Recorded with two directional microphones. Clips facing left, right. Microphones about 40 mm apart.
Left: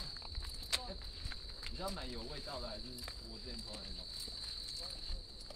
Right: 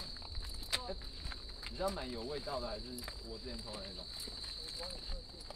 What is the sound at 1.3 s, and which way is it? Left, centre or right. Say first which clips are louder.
Speech: right 2 dB; centre.